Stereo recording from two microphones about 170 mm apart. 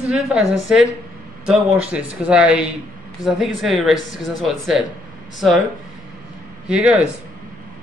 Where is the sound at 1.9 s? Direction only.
5° right (ahead or behind).